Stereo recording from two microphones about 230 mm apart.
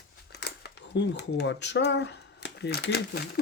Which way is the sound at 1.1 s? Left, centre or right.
Left.